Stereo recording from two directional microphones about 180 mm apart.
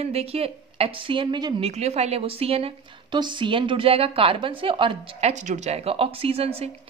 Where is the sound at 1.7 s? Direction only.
35° right (ahead or behind).